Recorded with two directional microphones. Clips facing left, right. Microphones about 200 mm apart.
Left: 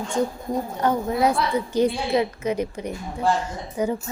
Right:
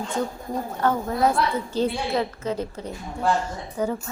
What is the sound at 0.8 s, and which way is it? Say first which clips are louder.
A woman's voice: even; 15° left (ahead or behind).